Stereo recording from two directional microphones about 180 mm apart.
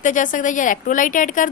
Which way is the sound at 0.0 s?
45° left (ahead or behind).